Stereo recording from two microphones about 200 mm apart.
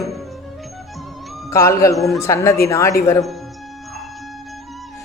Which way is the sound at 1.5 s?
15° left (ahead or behind).